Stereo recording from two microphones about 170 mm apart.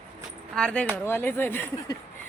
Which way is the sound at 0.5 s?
5° left (ahead or behind).